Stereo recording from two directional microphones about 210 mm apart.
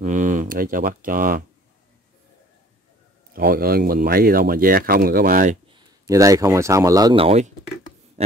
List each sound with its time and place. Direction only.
0.0 s speech: 35° right (ahead or behind)
3.3 s speech: 45° right (ahead or behind)
5.7 s speech: 15° right (ahead or behind)